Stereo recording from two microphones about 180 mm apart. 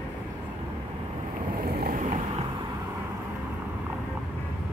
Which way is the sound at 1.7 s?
55° right (ahead or behind).